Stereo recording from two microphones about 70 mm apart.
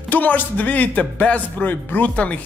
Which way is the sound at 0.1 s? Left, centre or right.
Left.